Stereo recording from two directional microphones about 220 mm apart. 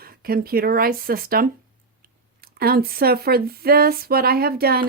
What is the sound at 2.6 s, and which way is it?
Speech, 45° right (ahead or behind).